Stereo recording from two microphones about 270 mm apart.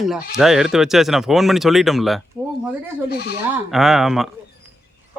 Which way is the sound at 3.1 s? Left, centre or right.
Left.